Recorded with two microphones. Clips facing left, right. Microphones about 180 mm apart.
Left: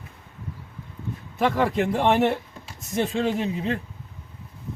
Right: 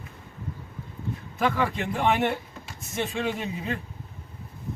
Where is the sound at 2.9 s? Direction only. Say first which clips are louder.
Left 5 dB; 35° left (ahead or behind).